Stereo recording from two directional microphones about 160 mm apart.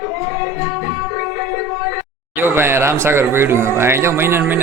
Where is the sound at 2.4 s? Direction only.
15° right (ahead or behind).